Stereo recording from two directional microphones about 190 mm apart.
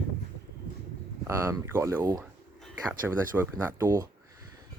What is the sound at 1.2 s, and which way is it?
Speech, 15° right (ahead or behind).